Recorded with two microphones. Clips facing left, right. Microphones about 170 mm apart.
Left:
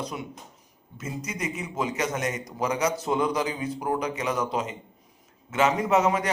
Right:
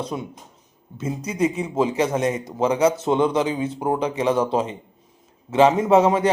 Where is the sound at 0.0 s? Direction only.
25° right (ahead or behind).